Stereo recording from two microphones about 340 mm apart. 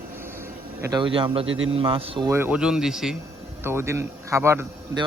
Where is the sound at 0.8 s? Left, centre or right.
Centre.